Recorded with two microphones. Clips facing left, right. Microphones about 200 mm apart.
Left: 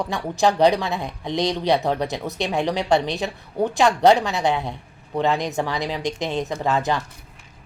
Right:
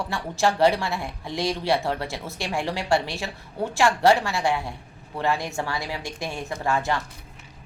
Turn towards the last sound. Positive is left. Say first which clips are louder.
# left 3 dB
turn(degrees=20)  # may be behind; listen again after turning